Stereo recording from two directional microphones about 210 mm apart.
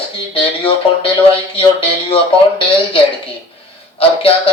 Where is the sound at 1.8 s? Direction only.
25° left (ahead or behind).